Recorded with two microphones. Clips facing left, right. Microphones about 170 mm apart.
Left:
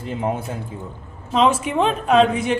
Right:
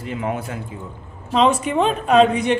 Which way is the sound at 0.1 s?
35° left (ahead or behind).